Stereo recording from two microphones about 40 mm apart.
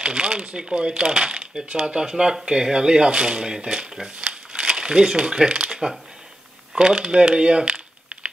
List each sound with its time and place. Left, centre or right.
0.0 s speech: right
4.3 s a sound: right
6.7 s speech: centre